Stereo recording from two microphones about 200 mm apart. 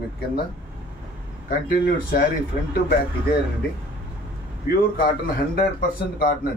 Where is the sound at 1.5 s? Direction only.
45° left (ahead or behind).